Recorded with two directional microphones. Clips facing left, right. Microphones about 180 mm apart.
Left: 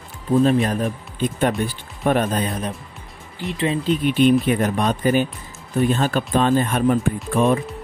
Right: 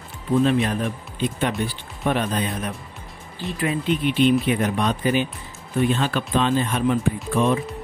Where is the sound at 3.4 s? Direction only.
20° left (ahead or behind).